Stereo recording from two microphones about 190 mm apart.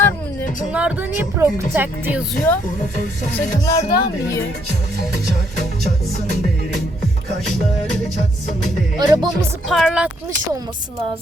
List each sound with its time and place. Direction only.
0.7 s speech: 5° right (ahead or behind)
2.5 s speech: 10° left (ahead or behind)
3.7 s speech: 15° left (ahead or behind)
9.0 s speech: 20° right (ahead or behind)
9.6 s speech: centre (ahead or behind)